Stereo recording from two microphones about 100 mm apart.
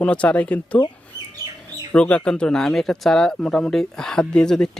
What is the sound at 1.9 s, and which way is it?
Speech, 10° left (ahead or behind).